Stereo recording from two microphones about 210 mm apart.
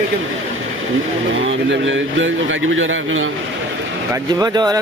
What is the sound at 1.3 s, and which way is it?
A man's voice, 65° right (ahead or behind).